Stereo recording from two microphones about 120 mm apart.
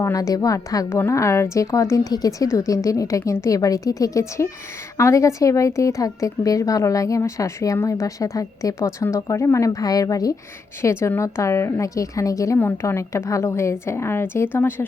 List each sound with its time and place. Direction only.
0.0 s a woman's voice: 30° left (ahead or behind)